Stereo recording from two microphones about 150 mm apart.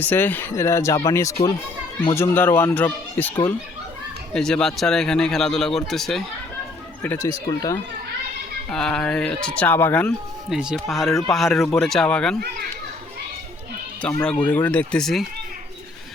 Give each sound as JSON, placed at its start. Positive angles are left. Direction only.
{"t": 0.0, "sound": "speech", "side_deg": 15}
{"t": 4.4, "sound": "speech", "side_deg": 5}
{"t": 7.0, "sound": "speech", "side_deg": 15}
{"t": 7.3, "sound": "speech", "side_deg": 25}
{"t": 8.7, "sound": "speech", "side_deg": 5}
{"t": 10.5, "sound": "speech", "side_deg": -5}
{"t": 14.2, "sound": "speech", "side_deg": 10}